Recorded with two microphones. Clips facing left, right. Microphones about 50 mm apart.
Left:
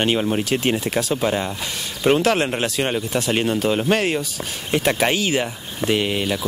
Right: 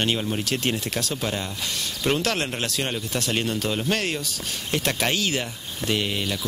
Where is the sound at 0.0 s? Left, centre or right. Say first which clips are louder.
Left 5 dB; left.